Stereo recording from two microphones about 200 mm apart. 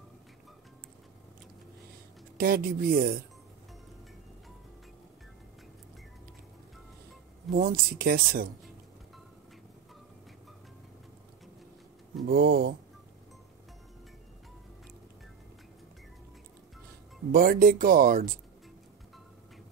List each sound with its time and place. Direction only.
2.3 s speech: 50° right (ahead or behind)
7.5 s speech: 45° right (ahead or behind)
12.3 s speech: 45° right (ahead or behind)
17.3 s speech: 45° right (ahead or behind)